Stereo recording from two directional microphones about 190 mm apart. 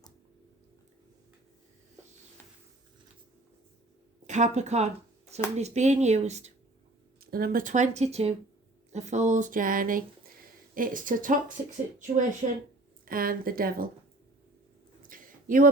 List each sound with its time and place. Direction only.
4.3 s speech: 40° right (ahead or behind)
7.2 s speech: 55° right (ahead or behind)
15.1 s a sound: 45° right (ahead or behind)